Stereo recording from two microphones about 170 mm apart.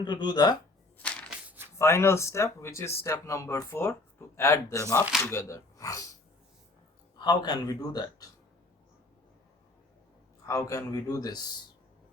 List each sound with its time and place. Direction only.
0.0 s a man's voice: 25° left (ahead or behind)
1.7 s a man's voice: 15° left (ahead or behind)
7.2 s a man's voice: 25° left (ahead or behind)
10.4 s a man's voice: 20° left (ahead or behind)